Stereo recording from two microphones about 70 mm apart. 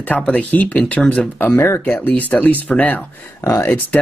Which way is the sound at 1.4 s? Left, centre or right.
Left.